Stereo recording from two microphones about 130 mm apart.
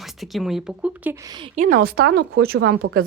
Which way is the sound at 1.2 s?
30° right (ahead or behind).